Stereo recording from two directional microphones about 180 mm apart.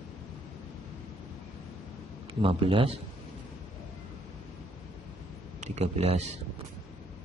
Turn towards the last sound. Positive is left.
turn(degrees=-35)  # may be behind; listen again after turning